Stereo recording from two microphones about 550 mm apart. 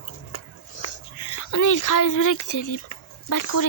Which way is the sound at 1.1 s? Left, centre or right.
Left.